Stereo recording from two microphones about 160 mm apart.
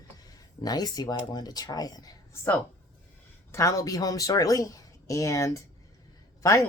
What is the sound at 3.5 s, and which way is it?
Speech, 20° left (ahead or behind).